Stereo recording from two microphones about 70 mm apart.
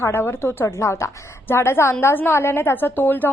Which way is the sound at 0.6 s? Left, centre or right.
Left.